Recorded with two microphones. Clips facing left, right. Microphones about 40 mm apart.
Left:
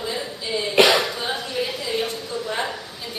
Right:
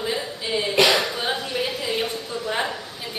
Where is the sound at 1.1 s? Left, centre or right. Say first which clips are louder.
Right 1 dB; centre.